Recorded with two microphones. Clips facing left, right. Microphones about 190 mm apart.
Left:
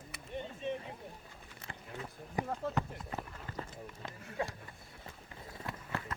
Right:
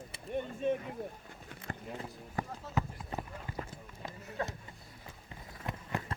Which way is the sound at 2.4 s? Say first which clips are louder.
Left 2 dB; 15° left (ahead or behind).